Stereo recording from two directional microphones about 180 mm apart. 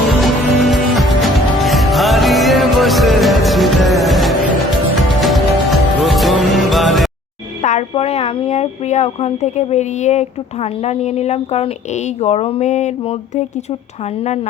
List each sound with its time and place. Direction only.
0.2 s music: centre (ahead or behind)
7.6 s speech: 40° left (ahead or behind)